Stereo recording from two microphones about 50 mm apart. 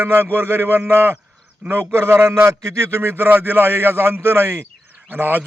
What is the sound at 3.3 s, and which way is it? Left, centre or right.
Speech, right.